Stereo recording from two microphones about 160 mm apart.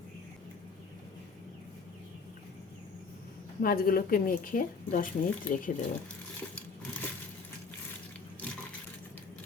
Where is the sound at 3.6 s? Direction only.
65° left (ahead or behind).